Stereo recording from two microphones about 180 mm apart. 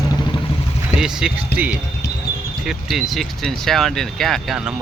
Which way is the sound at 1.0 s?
5° right (ahead or behind).